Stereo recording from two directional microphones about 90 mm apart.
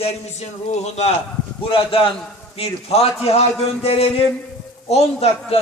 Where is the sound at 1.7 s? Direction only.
90° left.